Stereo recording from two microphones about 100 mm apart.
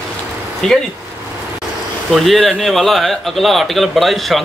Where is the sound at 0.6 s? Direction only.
5° left (ahead or behind).